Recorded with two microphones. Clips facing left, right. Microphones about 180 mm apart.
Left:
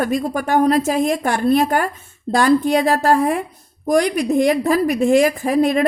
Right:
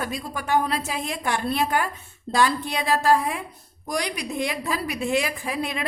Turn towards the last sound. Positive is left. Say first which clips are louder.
# left 13 dB
turn(degrees=45)  # may be behind; listen again after turning